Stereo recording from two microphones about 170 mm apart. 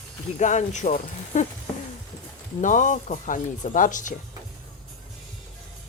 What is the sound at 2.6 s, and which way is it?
Speech, 50° left (ahead or behind).